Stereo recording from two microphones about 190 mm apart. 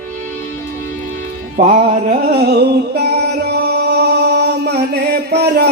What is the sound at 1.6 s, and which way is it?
Music, 30° right (ahead or behind).